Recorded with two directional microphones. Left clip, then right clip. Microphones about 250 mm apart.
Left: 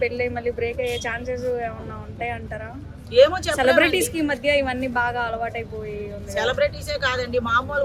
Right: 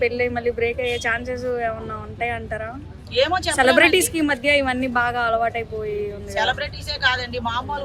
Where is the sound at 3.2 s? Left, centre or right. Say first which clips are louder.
Left 4 dB; centre.